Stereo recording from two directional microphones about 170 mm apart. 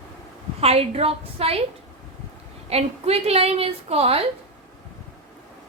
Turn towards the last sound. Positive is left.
turn(degrees=-35)  # may be behind; listen again after turning